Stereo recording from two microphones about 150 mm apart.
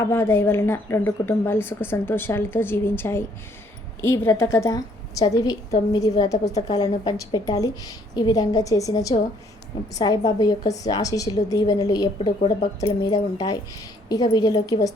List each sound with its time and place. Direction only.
0.0 s a woman's voice: 15° left (ahead or behind)
6.4 s speech: 50° left (ahead or behind)
6.7 s a woman's voice: 25° left (ahead or behind)
12.4 s speech: 45° left (ahead or behind)
14.1 s a woman's voice: 25° left (ahead or behind)